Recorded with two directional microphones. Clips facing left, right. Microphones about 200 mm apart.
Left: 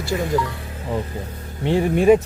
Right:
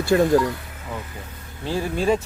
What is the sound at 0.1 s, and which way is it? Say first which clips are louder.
Speech: right 6 dB; 70° right (ahead or behind).